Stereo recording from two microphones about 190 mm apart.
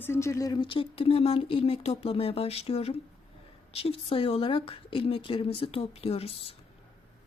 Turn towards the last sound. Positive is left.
turn(degrees=30)  # may be behind; listen again after turning